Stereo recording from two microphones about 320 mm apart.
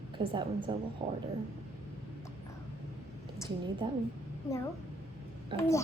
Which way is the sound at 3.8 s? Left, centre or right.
Centre.